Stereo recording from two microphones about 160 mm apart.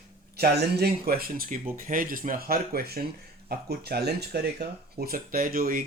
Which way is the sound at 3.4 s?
80° right.